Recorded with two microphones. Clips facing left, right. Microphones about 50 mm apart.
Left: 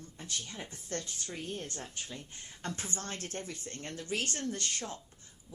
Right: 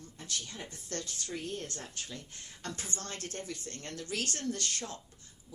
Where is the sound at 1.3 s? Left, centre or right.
Left.